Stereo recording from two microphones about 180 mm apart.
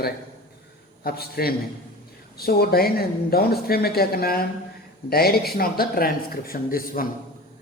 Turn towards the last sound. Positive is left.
turn(degrees=50)  # may be behind; listen again after turning